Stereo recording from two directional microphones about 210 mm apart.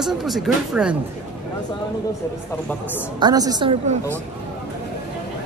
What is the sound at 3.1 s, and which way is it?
Speech, 20° right (ahead or behind).